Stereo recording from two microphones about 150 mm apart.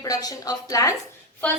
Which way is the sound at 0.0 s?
25° left (ahead or behind).